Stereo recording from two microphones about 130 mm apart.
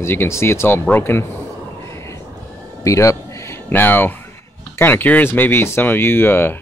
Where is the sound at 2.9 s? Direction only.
25° left (ahead or behind).